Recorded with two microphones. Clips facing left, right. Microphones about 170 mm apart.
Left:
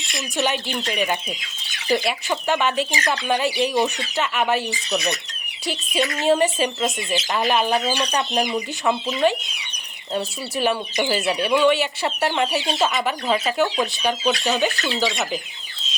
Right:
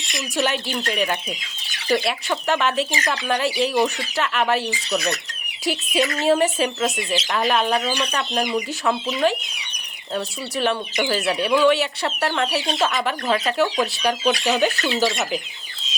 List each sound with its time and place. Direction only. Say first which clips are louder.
0.1 s speech: right 1 dB; centre (ahead or behind)
8.1 s speech: left 2 dB; 15° left (ahead or behind)
9.2 s speech: left 1 dB; centre (ahead or behind)
10.6 s speech: even; 5° left (ahead or behind)